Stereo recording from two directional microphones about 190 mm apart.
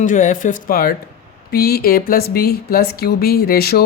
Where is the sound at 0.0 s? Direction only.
40° left (ahead or behind).